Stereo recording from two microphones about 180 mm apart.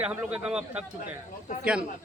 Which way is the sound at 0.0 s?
5° right (ahead or behind).